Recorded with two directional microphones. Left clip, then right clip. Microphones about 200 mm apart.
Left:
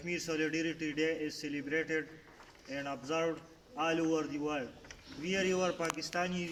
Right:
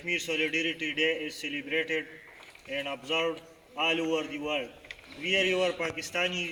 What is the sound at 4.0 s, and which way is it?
Speech, 20° left (ahead or behind).